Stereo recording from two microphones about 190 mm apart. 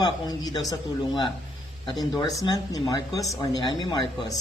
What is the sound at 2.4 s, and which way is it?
Speech, 20° left (ahead or behind).